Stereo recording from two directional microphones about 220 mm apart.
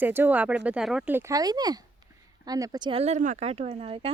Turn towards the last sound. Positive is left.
turn(degrees=-25)  # may be behind; listen again after turning